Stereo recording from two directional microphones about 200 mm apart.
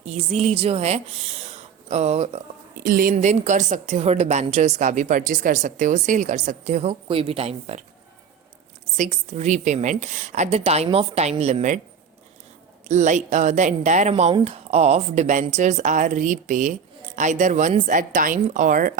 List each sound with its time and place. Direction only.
0.0 s speech: 35° right (ahead or behind)
2.8 s a woman's voice: 45° right (ahead or behind)
9.0 s a woman's voice: 35° right (ahead or behind)
12.9 s a woman's voice: 35° right (ahead or behind)